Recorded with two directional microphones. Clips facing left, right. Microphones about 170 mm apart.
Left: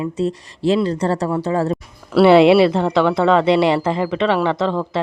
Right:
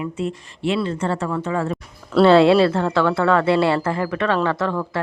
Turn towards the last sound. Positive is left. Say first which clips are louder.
# left 3 dB
turn(degrees=20)  # may be behind; listen again after turning